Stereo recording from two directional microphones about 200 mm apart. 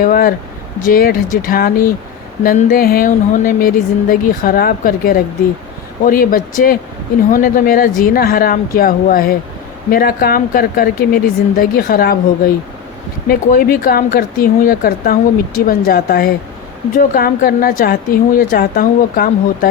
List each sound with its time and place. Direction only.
0.0 s speech: 45° left (ahead or behind)